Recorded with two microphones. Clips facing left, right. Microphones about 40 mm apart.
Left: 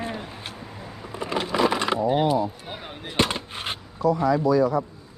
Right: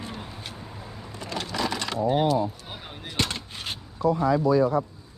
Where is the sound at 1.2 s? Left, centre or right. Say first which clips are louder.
Left 7 dB; left.